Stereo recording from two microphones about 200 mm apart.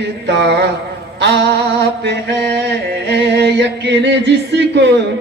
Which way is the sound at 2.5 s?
60° right (ahead or behind).